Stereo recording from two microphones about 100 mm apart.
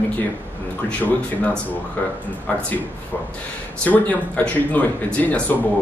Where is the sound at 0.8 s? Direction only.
10° left (ahead or behind).